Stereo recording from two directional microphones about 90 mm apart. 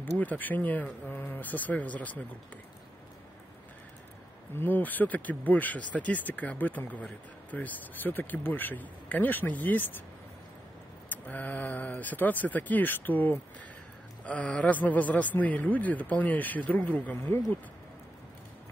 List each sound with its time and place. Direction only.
0.0 s a man's voice: 20° left (ahead or behind)
4.6 s a man's voice: 20° left (ahead or behind)
11.1 s a man's voice: 15° left (ahead or behind)